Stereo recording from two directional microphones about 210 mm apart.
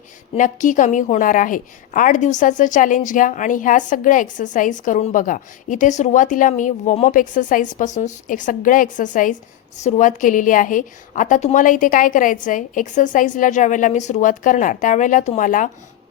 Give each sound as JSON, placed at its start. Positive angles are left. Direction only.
{"t": 0.3, "sound": "a woman's voice", "side_deg": 40}